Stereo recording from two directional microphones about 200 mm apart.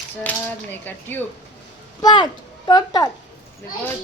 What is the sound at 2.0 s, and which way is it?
Speech, 20° left (ahead or behind).